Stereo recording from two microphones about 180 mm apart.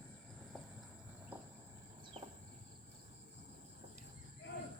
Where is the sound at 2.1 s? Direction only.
35° right (ahead or behind).